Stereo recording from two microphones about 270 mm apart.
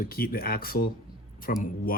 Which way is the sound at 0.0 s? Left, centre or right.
Left.